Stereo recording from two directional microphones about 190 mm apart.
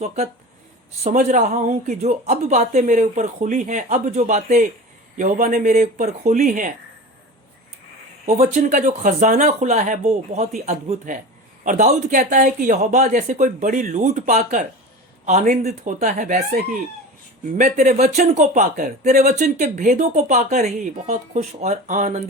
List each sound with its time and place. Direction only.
1.0 s speech: 40° right (ahead or behind)
8.4 s speech: 40° right (ahead or behind)
17.6 s speech: 40° right (ahead or behind)